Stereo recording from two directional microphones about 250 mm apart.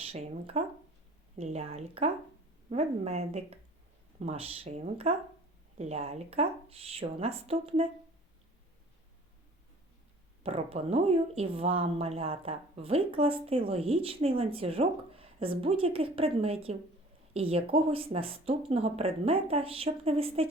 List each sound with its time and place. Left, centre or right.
0.0 s speech: right
10.4 s speech: right